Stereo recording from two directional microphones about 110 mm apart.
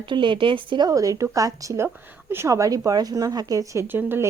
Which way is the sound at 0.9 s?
30° right (ahead or behind).